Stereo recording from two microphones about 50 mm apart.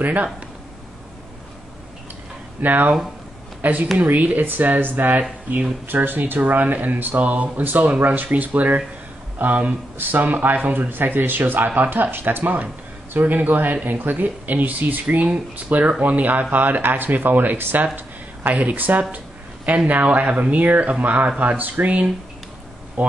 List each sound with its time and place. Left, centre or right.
0.0 s speech: right
2.6 s speech: right
17.9 s a sound: right
18.6 s speech: right
19.1 s a sound: right
19.9 s speech: right